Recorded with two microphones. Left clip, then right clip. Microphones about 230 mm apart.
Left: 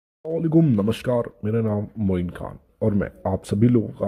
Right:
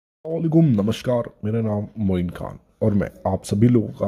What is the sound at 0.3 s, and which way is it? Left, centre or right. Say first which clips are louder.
Speech: even; centre.